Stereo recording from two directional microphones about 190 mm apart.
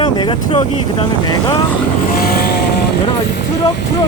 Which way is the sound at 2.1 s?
50° left (ahead or behind).